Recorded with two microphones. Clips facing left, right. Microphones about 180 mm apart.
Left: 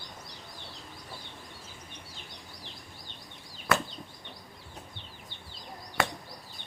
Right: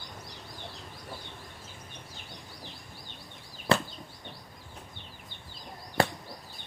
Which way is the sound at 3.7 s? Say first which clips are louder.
Right 2 dB; 30° right (ahead or behind).